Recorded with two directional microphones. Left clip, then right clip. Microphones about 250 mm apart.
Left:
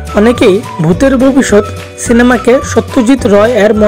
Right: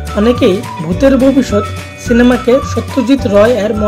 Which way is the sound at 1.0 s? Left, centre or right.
Left.